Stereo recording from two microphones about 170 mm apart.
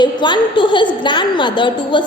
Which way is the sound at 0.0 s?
25° left (ahead or behind).